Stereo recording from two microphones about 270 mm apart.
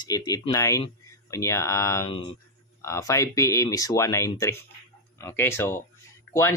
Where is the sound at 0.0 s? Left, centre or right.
Centre.